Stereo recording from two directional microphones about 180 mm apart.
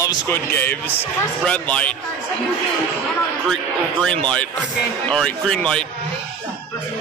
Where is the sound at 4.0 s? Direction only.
5° left (ahead or behind).